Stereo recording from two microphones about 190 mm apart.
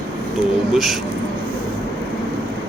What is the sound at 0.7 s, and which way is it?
Speech, centre (ahead or behind).